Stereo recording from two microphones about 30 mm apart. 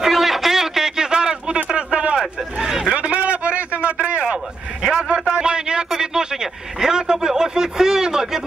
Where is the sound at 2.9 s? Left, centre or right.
Right.